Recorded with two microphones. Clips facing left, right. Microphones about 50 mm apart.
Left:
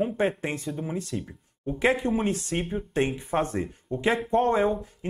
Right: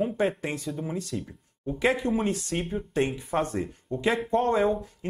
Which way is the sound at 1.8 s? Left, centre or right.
Left.